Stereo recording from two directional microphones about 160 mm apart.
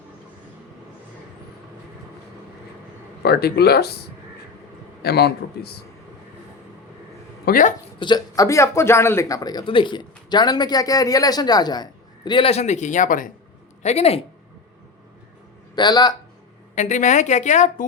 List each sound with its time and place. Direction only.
3.2 s speech: 80° left
5.0 s speech: 85° left
7.4 s speech: 60° left (ahead or behind)
7.9 s a man's voice: 30° left (ahead or behind); by 13.3 s 60° left (ahead or behind)
13.8 s speech: 40° left (ahead or behind)
15.7 s speech: 25° left (ahead or behind)
16.7 s a woman's voice: 50° left (ahead or behind)